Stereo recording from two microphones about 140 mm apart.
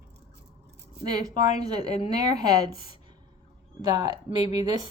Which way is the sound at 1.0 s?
30° right (ahead or behind).